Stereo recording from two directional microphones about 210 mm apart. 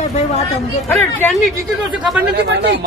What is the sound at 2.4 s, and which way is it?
Speech, 55° right (ahead or behind).